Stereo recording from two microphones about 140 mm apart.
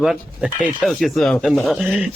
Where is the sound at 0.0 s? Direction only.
5° right (ahead or behind).